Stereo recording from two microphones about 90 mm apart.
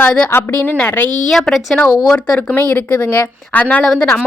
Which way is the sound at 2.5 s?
20° left (ahead or behind).